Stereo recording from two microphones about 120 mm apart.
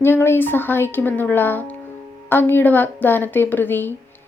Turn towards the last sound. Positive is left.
turn(degrees=15)  # may be behind; listen again after turning